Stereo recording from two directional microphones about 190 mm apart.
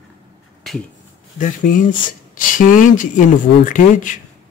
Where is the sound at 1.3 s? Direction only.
45° left (ahead or behind).